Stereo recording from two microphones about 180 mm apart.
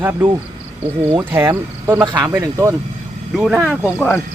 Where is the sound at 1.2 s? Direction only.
15° right (ahead or behind).